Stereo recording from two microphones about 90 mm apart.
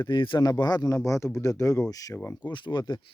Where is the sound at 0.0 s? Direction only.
60° left (ahead or behind).